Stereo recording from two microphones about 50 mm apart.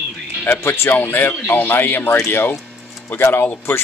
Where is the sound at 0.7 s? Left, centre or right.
Left.